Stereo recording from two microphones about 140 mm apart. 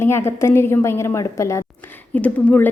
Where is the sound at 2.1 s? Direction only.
10° left (ahead or behind).